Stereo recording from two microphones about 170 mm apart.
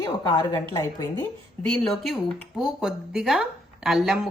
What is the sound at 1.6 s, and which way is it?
Speech, centre (ahead or behind).